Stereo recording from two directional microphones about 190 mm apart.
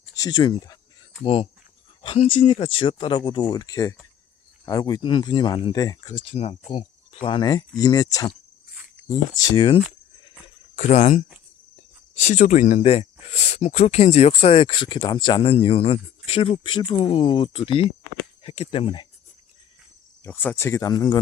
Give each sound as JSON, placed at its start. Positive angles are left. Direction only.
{"t": 0.1, "sound": "speech", "side_deg": 20}
{"t": 10.8, "sound": "speech", "side_deg": 35}
{"t": 20.2, "sound": "speech", "side_deg": 10}